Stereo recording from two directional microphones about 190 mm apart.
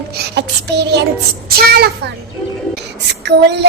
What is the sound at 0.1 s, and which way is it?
Child singing, 60° right (ahead or behind).